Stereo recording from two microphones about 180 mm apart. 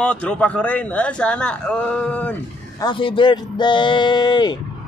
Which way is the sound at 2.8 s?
25° left (ahead or behind).